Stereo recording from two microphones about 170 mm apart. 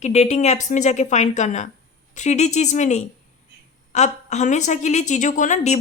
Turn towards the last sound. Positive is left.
turn(degrees=45)  # may be behind; listen again after turning